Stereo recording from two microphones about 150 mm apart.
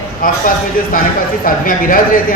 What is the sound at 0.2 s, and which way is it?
Speech, 70° left (ahead or behind).